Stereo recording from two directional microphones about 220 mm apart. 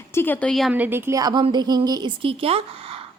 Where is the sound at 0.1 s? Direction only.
10° left (ahead or behind).